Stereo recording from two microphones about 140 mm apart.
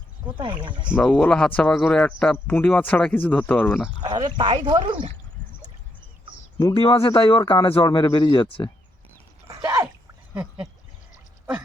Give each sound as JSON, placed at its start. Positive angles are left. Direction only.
{"t": 0.3, "sound": "speech", "side_deg": -35}
{"t": 1.0, "sound": "speech", "side_deg": 5}
{"t": 4.0, "sound": "speech", "side_deg": -30}
{"t": 6.7, "sound": "speech", "side_deg": 40}
{"t": 9.5, "sound": "a sound", "side_deg": -25}